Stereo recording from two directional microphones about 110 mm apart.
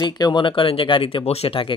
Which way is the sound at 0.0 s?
40° left (ahead or behind).